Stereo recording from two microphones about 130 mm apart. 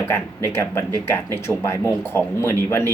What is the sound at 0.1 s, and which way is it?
Speech, 20° left (ahead or behind).